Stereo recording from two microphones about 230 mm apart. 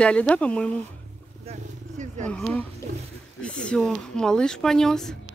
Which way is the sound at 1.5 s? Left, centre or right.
Right.